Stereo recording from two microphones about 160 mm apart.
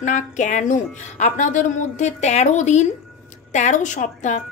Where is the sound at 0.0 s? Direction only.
50° left (ahead or behind).